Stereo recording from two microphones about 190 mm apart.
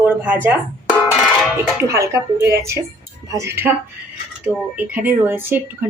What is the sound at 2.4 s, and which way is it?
Speech, 55° right (ahead or behind).